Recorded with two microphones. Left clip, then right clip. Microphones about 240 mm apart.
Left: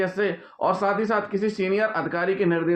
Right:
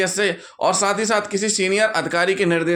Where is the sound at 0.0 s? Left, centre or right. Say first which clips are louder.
Right 4 dB; right.